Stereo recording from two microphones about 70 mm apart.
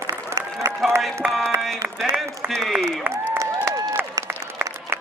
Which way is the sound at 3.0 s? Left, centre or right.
Right.